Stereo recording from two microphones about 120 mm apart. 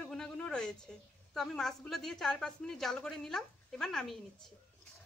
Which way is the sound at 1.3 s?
5° left (ahead or behind).